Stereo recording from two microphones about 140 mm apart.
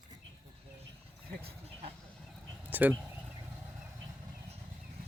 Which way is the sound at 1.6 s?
45° right (ahead or behind).